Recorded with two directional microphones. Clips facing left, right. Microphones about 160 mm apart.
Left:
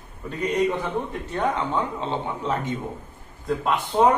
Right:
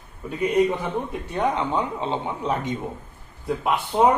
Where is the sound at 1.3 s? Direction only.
15° right (ahead or behind).